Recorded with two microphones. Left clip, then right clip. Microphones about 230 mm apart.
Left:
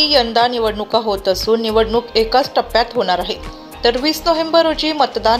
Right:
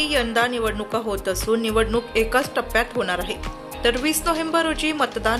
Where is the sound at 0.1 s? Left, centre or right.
Centre.